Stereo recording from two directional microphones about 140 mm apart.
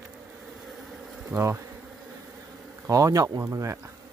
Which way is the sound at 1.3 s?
20° right (ahead or behind).